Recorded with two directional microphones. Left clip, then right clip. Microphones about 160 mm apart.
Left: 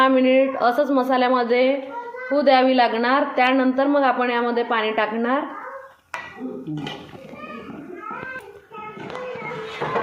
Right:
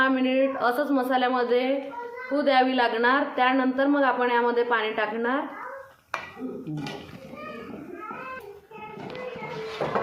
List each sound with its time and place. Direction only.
0.0 s a woman's voice: 40° left (ahead or behind)